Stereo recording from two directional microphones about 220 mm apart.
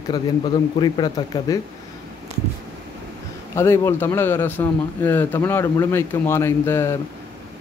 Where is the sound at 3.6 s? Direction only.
10° left (ahead or behind).